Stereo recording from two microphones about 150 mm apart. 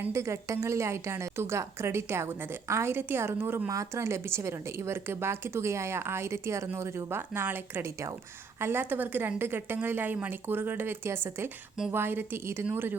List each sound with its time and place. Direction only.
0.0 s a woman's voice: 20° right (ahead or behind)